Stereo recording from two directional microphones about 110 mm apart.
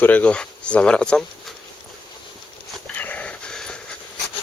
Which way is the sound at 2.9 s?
15° left (ahead or behind).